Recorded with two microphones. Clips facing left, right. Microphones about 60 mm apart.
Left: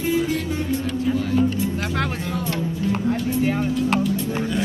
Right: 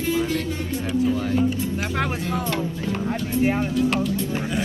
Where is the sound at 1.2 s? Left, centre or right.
Centre.